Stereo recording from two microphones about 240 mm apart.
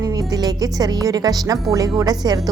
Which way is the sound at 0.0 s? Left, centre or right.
Centre.